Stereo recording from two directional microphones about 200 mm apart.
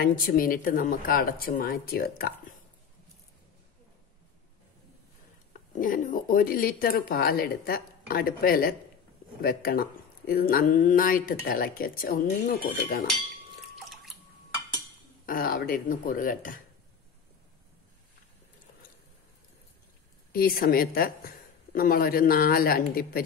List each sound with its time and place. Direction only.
0.0 s speech: 45° left (ahead or behind)
5.5 s speech: 40° left (ahead or behind)
13.7 s drip: centre (ahead or behind)
15.2 s speech: 45° left (ahead or behind)
20.3 s speech: 50° left (ahead or behind)